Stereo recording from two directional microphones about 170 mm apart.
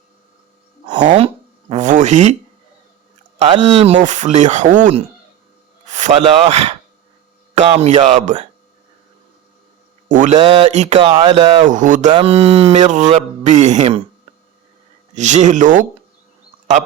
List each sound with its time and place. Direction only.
1.7 s a sound: 45° right (ahead or behind)
3.6 s a man's voice: 40° right (ahead or behind)
10.1 s speech: 45° right (ahead or behind)
10.4 s speech: 35° right (ahead or behind)
12.1 s speech: 35° right (ahead or behind)
15.1 s speech: 45° right (ahead or behind)